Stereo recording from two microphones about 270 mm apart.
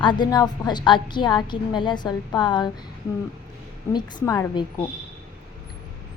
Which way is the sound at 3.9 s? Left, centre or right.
Centre.